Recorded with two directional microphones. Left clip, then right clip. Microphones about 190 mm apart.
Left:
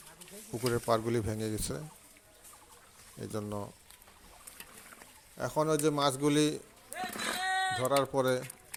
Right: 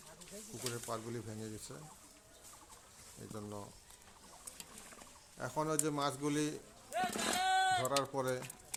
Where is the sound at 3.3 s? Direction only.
35° left (ahead or behind).